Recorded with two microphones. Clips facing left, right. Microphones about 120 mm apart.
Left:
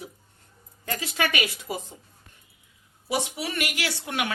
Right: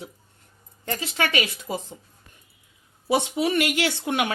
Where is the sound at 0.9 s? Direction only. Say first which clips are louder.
Right 2 dB; 25° right (ahead or behind).